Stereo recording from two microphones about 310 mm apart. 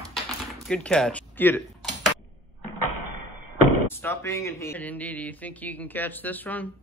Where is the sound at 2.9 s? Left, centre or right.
Right.